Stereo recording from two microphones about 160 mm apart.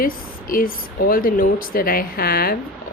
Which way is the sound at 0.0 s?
60° left (ahead or behind).